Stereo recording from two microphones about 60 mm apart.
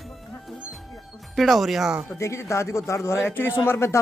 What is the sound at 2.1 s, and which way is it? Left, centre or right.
A man's voice, left.